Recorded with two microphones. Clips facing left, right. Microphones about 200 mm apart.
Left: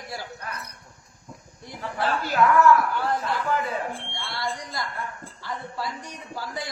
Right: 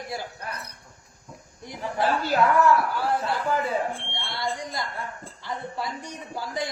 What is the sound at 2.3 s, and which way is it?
Speech, 35° right (ahead or behind).